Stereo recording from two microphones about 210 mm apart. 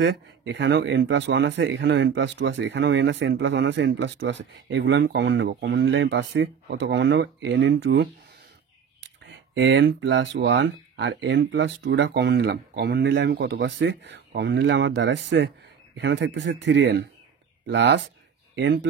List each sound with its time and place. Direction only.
0.0 s speech: 60° right (ahead or behind)
9.5 s speech: 60° right (ahead or behind)